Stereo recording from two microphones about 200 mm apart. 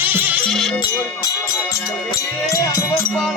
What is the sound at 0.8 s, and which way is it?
Speech, 20° left (ahead or behind).